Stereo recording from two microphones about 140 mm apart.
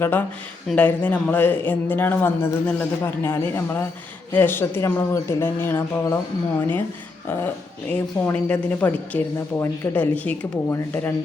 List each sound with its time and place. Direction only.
0.0 s a woman's voice: 15° left (ahead or behind)
7.3 s a woman's voice: 15° left (ahead or behind)